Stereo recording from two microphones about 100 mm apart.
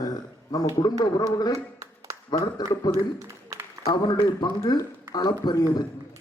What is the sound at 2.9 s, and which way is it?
Speech, 30° right (ahead or behind).